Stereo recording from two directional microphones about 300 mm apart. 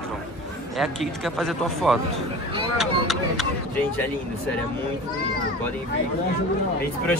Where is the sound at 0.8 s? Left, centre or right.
Centre.